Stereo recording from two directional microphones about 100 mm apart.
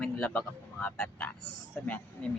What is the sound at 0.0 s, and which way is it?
Speech, 15° left (ahead or behind).